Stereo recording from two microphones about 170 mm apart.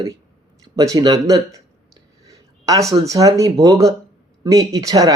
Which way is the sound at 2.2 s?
20° right (ahead or behind).